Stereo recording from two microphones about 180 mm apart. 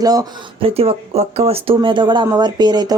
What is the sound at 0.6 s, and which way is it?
Speech, 30° right (ahead or behind).